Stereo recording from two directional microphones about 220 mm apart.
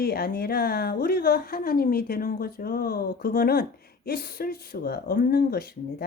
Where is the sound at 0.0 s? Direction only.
45° left (ahead or behind).